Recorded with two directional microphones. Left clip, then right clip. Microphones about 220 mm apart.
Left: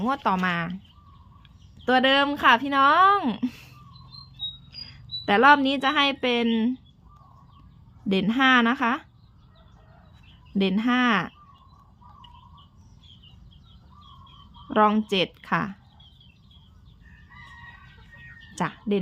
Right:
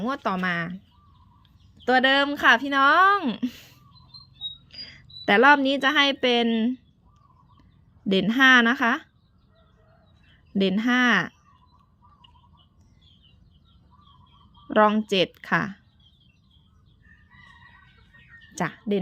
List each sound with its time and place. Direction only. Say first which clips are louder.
0.0 s speech: left 2 dB; 15° right (ahead or behind)
1.8 s a woman's voice: even; 25° right (ahead or behind)
8.0 s speech: right 3 dB; 20° right (ahead or behind)
10.5 s speech: right 1 dB; 20° right (ahead or behind)
14.7 s speech: right 1 dB; 20° right (ahead or behind)
18.5 s a sound: even; 20° right (ahead or behind)